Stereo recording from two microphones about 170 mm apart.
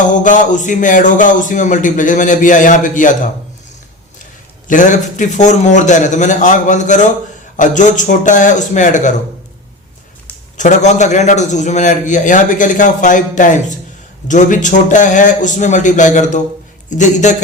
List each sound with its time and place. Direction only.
0.1 s a man's voice: 50° left (ahead or behind)
4.7 s a man's voice: 45° left (ahead or behind)
10.6 s a man's voice: 45° left (ahead or behind)